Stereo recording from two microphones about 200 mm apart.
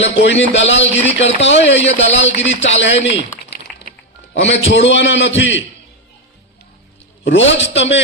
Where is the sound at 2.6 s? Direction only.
65° left (ahead or behind).